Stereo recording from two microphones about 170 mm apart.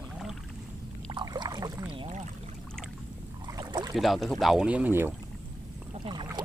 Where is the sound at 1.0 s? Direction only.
25° right (ahead or behind).